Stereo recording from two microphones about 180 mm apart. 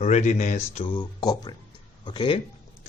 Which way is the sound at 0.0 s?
40° left (ahead or behind).